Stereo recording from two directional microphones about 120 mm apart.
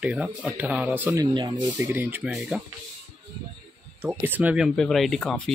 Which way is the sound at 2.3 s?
5° right (ahead or behind).